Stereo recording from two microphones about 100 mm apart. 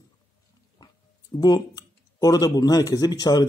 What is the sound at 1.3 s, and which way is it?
Speech, 45° left (ahead or behind).